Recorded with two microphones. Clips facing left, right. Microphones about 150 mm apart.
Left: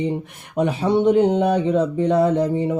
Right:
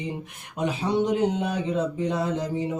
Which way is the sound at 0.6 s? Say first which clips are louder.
Left 6 dB; 55° left (ahead or behind).